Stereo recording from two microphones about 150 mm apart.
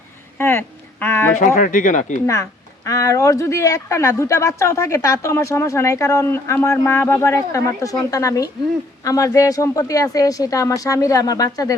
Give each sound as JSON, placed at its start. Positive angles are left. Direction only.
{"t": 0.3, "sound": "a sound", "side_deg": 15}
{"t": 1.4, "sound": "speech", "side_deg": 60}
{"t": 2.2, "sound": "speech", "side_deg": 20}